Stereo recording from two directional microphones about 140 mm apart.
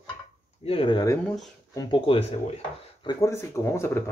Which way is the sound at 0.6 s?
40° left (ahead or behind).